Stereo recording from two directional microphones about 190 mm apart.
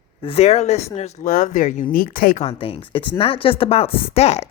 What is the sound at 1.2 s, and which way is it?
Speech, 45° left (ahead or behind).